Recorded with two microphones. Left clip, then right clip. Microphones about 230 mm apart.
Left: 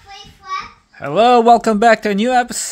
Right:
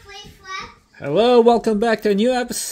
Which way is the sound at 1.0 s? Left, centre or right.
Left.